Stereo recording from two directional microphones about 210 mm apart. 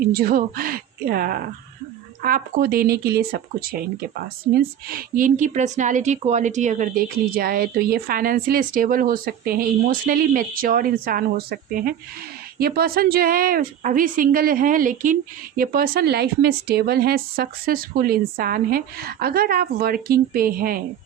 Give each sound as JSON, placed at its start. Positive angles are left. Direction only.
{"t": 0.1, "sound": "a woman's voice", "side_deg": -45}